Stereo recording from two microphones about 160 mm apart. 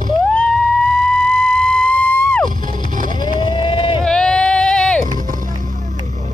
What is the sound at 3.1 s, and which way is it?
Vehicle, 30° left (ahead or behind).